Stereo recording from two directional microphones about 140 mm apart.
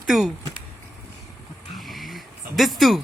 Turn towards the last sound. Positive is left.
turn(degrees=0)  # may be behind; listen again after turning